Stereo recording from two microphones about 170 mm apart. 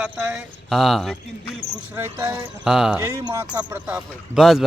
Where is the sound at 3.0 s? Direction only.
15° right (ahead or behind).